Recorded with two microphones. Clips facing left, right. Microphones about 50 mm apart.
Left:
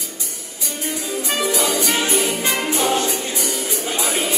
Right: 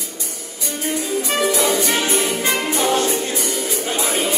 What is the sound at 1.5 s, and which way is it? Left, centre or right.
Music, right.